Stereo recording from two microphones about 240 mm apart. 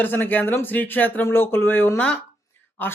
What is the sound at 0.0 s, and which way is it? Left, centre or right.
Speech, centre.